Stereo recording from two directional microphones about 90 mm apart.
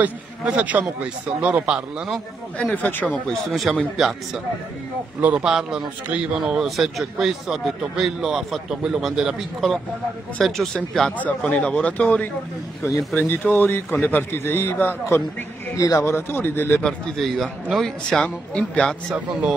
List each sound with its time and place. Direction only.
0.0 s speech: 15° right (ahead or behind)
2.7 s speech: 20° left (ahead or behind)
3.7 s speech: 5° right (ahead or behind)
5.2 s speech: 10° right (ahead or behind); by 11.1 s 5° left (ahead or behind)
11.1 s a man's voice: 15° left (ahead or behind)
15.7 s a man's voice: 40° left (ahead or behind)
16.8 s speech: centre (ahead or behind)